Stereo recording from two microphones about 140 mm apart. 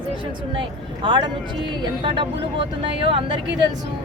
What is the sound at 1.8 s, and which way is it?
Speech, 35° right (ahead or behind).